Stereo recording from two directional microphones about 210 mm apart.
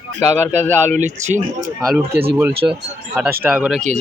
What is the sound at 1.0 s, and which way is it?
Speech, 35° right (ahead or behind).